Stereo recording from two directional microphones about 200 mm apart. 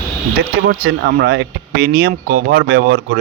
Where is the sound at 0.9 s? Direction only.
55° right (ahead or behind).